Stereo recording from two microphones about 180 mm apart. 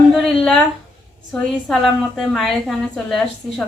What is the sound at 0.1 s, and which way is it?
A woman's voice, 5° left (ahead or behind).